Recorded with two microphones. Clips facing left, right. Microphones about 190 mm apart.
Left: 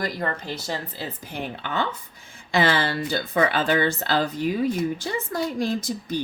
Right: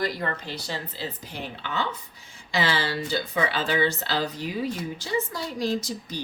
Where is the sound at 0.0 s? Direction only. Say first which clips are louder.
Left 1 dB; 45° left (ahead or behind).